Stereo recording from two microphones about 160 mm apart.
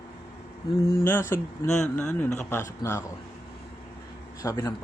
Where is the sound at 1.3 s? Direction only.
5° left (ahead or behind).